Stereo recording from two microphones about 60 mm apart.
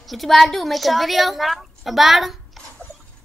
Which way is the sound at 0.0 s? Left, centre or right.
Centre.